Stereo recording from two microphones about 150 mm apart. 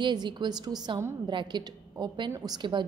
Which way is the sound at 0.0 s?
30° right (ahead or behind).